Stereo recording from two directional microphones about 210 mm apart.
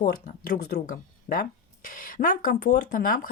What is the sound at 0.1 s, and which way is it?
Speech, 50° left (ahead or behind).